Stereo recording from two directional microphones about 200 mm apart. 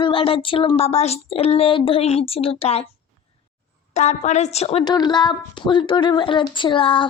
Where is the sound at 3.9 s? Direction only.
35° left (ahead or behind).